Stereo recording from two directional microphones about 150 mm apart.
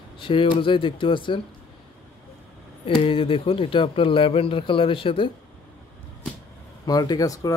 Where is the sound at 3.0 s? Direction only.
35° left (ahead or behind).